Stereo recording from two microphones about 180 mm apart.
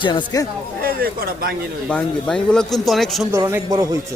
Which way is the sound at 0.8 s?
55° right (ahead or behind).